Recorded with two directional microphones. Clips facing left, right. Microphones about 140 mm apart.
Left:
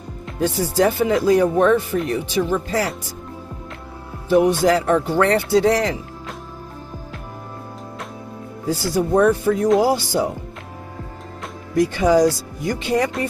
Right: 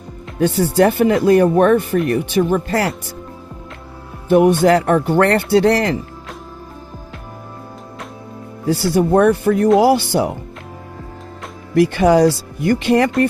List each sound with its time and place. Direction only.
0.3 s speech: 65° right (ahead or behind)
4.3 s speech: 55° right (ahead or behind)
8.7 s speech: 65° right (ahead or behind)
11.7 s speech: 65° right (ahead or behind)